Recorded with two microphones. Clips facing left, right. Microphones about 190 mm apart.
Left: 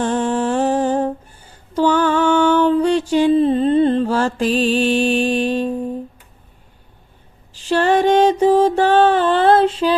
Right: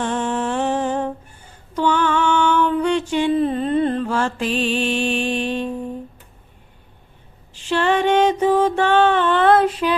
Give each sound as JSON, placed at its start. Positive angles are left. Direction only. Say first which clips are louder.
{"t": 0.0, "sound": "music", "louder": "left 4 dB", "side_deg": 35}
{"t": 1.7, "sound": "a sound", "louder": "left 3 dB", "side_deg": 35}
{"t": 7.5, "sound": "mantra", "louder": "left 3 dB", "side_deg": 40}